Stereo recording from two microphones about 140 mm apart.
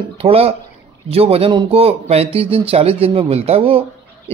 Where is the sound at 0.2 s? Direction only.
45° right (ahead or behind).